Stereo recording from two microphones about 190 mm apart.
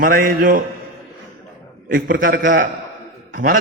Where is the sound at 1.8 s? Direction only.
45° right (ahead or behind).